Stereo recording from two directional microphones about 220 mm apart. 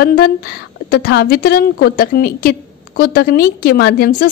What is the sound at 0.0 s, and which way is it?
A woman's voice, 45° left (ahead or behind).